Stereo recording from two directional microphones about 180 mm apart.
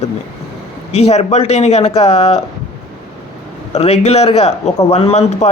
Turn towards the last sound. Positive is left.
turn(degrees=40)  # may be behind; listen again after turning